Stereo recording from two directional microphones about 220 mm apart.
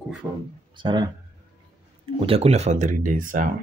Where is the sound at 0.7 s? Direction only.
20° right (ahead or behind).